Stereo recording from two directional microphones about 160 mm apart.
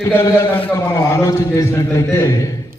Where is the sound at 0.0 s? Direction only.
15° left (ahead or behind).